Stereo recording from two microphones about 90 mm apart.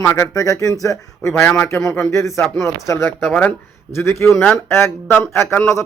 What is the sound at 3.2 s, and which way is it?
Speech, 15° left (ahead or behind).